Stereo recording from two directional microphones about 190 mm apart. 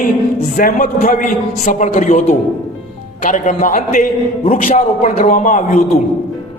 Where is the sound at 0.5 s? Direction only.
45° left (ahead or behind).